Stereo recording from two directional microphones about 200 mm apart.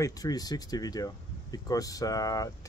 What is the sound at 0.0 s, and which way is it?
Speech, 20° left (ahead or behind).